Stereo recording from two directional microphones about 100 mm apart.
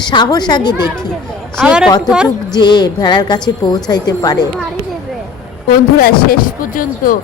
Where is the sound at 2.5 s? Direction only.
45° left (ahead or behind).